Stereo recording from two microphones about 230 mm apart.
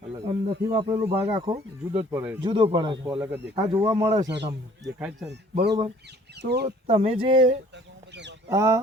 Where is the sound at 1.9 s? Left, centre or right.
Centre.